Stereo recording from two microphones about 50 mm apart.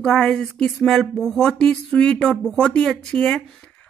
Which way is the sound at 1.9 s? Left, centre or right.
Centre.